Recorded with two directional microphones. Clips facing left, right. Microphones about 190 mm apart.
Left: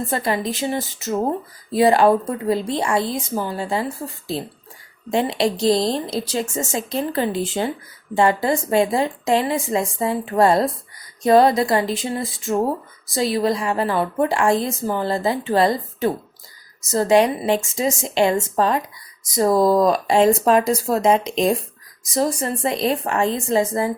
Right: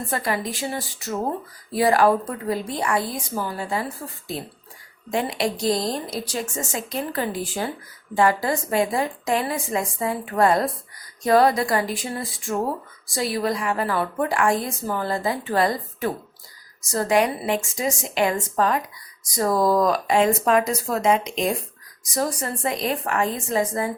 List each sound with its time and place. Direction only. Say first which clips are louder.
0.1 s a woman's voice: left 1 dB; 25° left (ahead or behind)
5.1 s a woman's voice: left 4 dB; 25° left (ahead or behind)